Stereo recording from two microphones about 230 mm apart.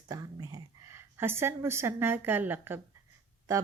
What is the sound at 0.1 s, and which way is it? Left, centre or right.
A woman's voice, centre.